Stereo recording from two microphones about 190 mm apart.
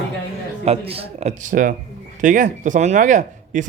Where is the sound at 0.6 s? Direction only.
30° right (ahead or behind).